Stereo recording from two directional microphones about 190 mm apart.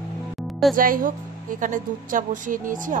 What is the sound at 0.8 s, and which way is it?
A woman's voice, 45° right (ahead or behind).